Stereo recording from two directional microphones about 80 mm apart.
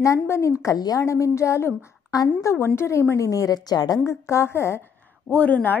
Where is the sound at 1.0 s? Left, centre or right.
Left.